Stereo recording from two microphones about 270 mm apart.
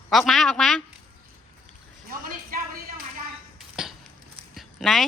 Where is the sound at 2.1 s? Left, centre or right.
Right.